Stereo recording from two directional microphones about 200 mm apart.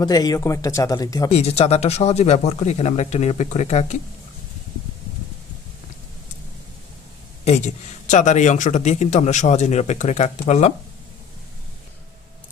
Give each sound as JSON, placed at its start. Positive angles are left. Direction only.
{"t": 0.0, "sound": "speech", "side_deg": 20}
{"t": 1.3, "sound": "a man's voice", "side_deg": 30}
{"t": 7.4, "sound": "a man's voice", "side_deg": 35}